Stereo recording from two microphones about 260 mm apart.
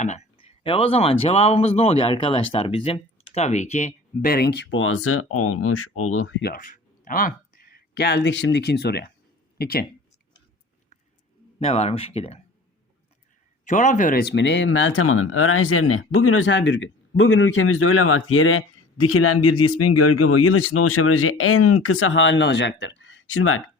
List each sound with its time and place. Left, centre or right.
0.0 s speech: left
6.5 s speech: left
11.6 s speech: left
13.7 s speech: left